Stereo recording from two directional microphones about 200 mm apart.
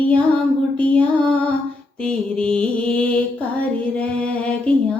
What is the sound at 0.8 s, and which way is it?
Mantra, 5° left (ahead or behind).